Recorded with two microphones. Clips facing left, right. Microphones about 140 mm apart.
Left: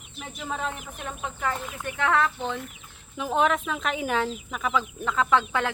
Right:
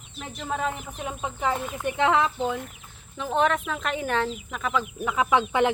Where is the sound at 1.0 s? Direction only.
15° right (ahead or behind).